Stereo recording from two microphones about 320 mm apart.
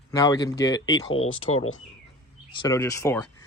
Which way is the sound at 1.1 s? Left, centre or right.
Left.